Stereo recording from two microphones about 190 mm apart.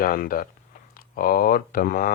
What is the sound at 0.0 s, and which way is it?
Speech, 50° left (ahead or behind).